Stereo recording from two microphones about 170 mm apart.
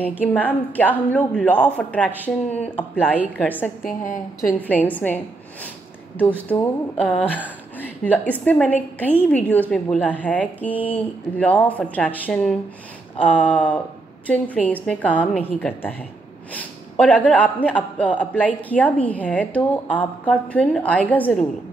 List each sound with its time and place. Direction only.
0.0 s a man's voice: 10° left (ahead or behind)
3.8 s a woman's voice: 50° left (ahead or behind)
4.6 s a man's voice: 10° left (ahead or behind)
6.5 s a man's voice: 10° left (ahead or behind)